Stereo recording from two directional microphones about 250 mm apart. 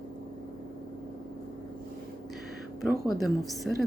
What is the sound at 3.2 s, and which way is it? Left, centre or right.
Speech, centre.